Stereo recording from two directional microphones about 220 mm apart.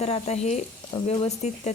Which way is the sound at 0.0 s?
30° left (ahead or behind).